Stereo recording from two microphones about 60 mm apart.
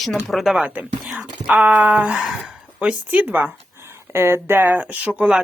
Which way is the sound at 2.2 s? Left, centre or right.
Centre.